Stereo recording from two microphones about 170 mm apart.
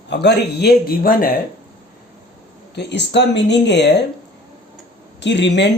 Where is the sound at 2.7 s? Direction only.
90° left.